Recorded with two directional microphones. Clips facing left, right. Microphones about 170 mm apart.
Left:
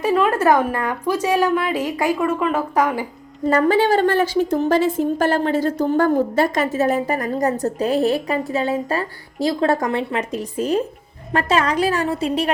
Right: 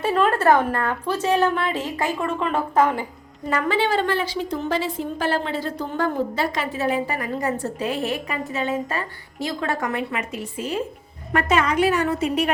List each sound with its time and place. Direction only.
0.0 s a woman's voice: 10° left (ahead or behind)
3.4 s a woman's voice: 40° left (ahead or behind)